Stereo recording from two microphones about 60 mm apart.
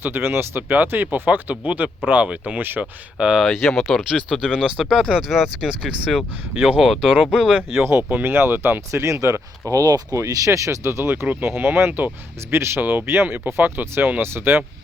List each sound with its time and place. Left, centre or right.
0.0 s speech: right
3.2 s speech: centre
3.4 s speech: centre
4.9 s speech: centre
7.3 s speech: centre
7.7 s speech: right
8.9 s speech: right
10.2 s speech: right
11.1 s speech: right
12.8 s speech: right